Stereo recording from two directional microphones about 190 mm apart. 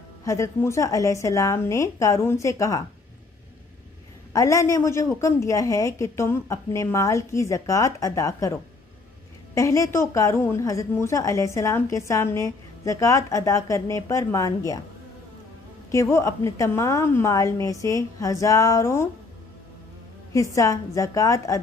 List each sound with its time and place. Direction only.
0.2 s a woman's voice: 15° left (ahead or behind)
4.3 s a woman's voice: 15° left (ahead or behind)
9.6 s a woman's voice: 15° left (ahead or behind)
15.9 s a woman's voice: 15° left (ahead or behind)
20.5 s a woman's voice: 15° left (ahead or behind)